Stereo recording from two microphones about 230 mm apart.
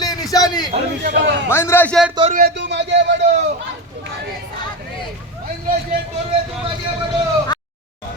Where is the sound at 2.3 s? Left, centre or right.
Right.